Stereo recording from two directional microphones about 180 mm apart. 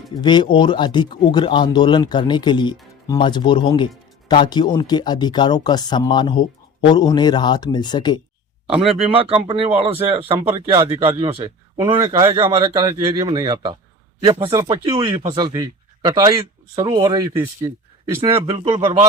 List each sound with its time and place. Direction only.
0.2 s speech: 25° left (ahead or behind)
8.7 s speech: centre (ahead or behind)
9.3 s speech: 30° right (ahead or behind)